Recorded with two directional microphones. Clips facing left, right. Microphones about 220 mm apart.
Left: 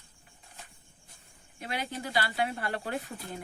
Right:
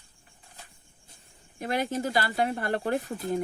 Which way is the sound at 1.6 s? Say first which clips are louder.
Right 8 dB; 45° right (ahead or behind).